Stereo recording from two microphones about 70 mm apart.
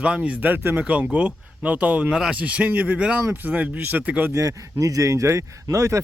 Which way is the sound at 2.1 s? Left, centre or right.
Centre.